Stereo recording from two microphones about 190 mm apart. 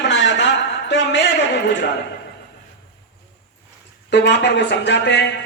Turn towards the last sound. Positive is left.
turn(degrees=65)  # may be behind; listen again after turning